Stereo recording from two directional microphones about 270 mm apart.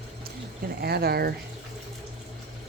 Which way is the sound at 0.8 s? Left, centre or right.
Right.